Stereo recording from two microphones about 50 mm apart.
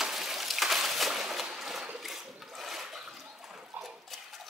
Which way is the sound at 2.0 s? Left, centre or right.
Centre.